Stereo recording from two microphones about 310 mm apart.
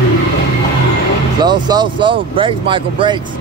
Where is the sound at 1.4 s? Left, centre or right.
Centre.